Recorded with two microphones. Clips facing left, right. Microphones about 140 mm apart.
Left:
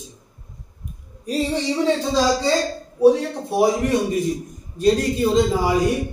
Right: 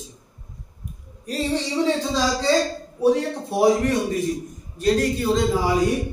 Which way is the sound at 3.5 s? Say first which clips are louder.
Even; 10° left (ahead or behind).